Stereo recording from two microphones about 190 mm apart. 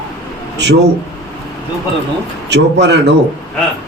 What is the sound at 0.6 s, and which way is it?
Speech, 65° right (ahead or behind).